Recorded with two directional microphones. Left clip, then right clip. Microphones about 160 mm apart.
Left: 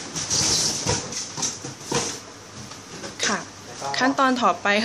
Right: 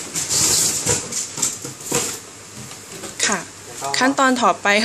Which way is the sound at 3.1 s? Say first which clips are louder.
Right 4 dB; 15° right (ahead or behind).